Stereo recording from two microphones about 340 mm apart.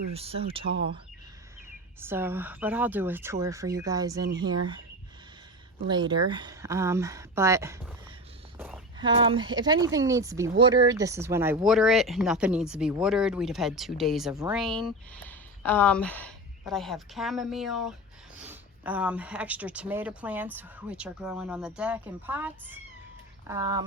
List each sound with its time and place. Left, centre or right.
0.1 s speech: centre
2.0 s speech: centre
5.9 s speech: centre